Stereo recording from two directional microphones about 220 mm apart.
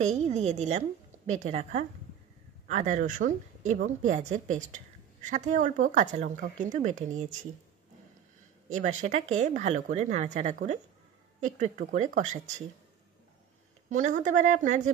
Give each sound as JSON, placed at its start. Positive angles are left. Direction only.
{"t": 0.0, "sound": "speech", "side_deg": -30}
{"t": 8.6, "sound": "speech", "side_deg": -35}
{"t": 13.8, "sound": "speech", "side_deg": -35}